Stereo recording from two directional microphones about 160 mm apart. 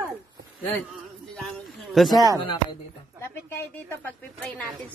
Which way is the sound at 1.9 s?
Centre (ahead or behind).